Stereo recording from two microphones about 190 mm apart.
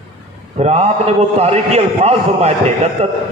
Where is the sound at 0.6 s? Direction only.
35° right (ahead or behind).